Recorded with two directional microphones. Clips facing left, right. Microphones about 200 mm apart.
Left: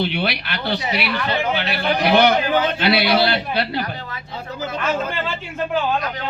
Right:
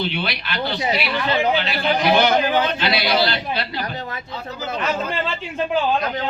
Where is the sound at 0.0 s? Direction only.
60° left (ahead or behind).